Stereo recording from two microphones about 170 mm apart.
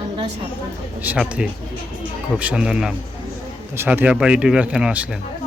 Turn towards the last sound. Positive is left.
turn(degrees=-5)  # may be behind; listen again after turning